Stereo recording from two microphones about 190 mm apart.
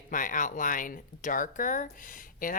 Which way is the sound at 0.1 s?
45° left (ahead or behind).